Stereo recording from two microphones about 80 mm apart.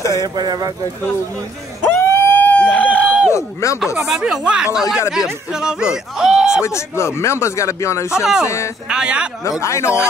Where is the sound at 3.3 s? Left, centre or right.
Left.